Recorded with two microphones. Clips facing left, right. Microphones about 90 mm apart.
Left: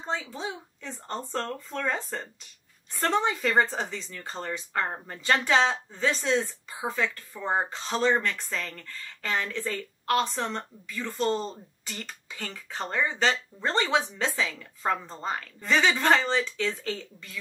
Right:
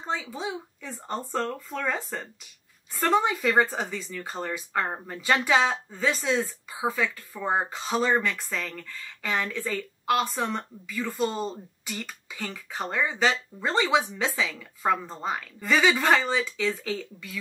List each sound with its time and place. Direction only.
0.2 s speech: 5° right (ahead or behind)